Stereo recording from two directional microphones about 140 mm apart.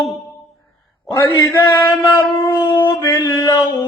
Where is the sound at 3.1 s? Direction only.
25° left (ahead or behind).